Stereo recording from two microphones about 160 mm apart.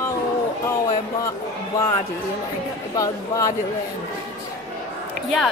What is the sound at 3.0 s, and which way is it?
Speech, 20° left (ahead or behind).